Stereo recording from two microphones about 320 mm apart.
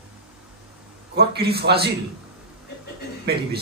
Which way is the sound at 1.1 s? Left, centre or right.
Right.